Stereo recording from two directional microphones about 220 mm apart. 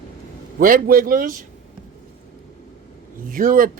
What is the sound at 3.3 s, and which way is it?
Speech, 40° right (ahead or behind).